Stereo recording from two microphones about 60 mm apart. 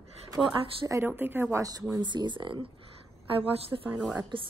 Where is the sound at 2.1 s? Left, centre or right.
Right.